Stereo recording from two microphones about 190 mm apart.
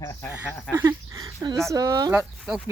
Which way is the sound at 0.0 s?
15° left (ahead or behind).